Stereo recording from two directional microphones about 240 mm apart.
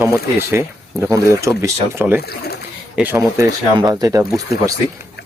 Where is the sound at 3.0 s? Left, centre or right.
Centre.